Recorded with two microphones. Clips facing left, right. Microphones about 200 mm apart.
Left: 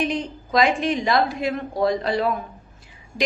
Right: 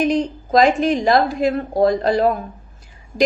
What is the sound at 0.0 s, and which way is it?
Speech, 40° right (ahead or behind).